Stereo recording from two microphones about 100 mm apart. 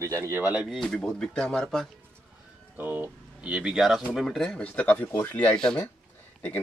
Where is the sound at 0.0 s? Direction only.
25° right (ahead or behind).